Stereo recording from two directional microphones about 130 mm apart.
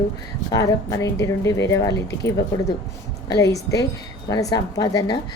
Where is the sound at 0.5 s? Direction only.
25° left (ahead or behind).